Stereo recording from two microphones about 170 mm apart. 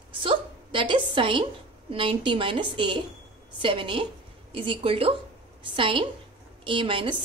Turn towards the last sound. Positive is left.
turn(degrees=-30)  # may be behind; listen again after turning